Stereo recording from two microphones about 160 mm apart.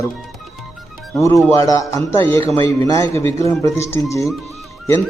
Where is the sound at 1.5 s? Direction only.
20° left (ahead or behind).